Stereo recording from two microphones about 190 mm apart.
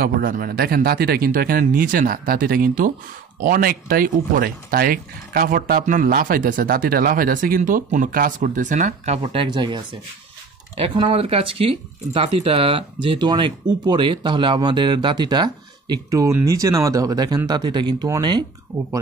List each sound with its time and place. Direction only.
0.0 s speech: 50° right (ahead or behind); by 9.8 s 25° right (ahead or behind)
10.8 s speech: 30° right (ahead or behind)